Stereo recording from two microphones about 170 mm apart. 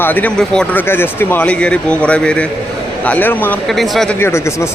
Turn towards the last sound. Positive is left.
turn(degrees=15)  # may be behind; listen again after turning